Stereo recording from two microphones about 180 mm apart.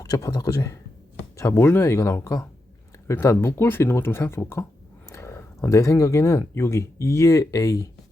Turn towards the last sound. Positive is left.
turn(degrees=20)  # may be behind; listen again after turning